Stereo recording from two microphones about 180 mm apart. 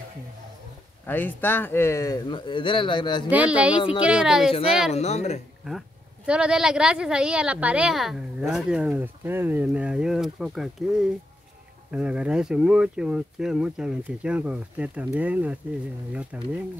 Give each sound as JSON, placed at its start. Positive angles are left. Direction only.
{"t": 1.0, "sound": "speech", "side_deg": 10}
{"t": 3.3, "sound": "speech", "side_deg": -10}
{"t": 4.5, "sound": "speech", "side_deg": 30}
{"t": 5.7, "sound": "speech", "side_deg": -5}